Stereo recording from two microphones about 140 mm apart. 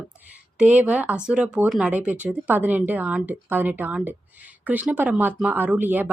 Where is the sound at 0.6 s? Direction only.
10° right (ahead or behind).